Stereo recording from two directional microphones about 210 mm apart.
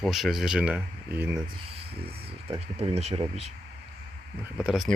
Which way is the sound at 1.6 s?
30° right (ahead or behind).